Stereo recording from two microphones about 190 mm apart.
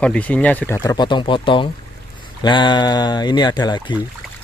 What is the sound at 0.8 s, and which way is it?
Speech, 20° left (ahead or behind).